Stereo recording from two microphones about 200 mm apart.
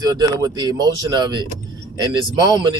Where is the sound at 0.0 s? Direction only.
20° right (ahead or behind).